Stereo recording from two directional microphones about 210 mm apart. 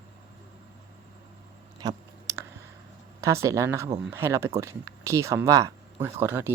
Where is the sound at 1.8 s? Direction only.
15° right (ahead or behind).